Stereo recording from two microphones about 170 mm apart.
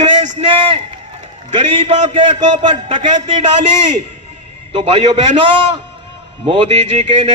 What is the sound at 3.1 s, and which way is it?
Speech, 45° right (ahead or behind).